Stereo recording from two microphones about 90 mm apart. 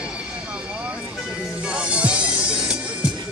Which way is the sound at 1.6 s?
10° right (ahead or behind).